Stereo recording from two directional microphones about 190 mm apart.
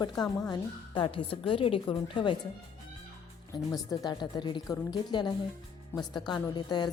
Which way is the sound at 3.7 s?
20° left (ahead or behind).